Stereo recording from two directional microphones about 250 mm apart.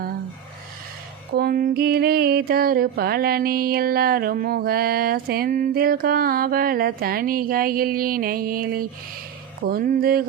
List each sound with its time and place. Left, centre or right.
1.3 s mantra: right